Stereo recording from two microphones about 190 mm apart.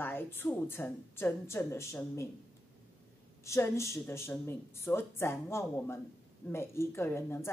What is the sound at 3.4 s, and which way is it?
Speech, 15° left (ahead or behind).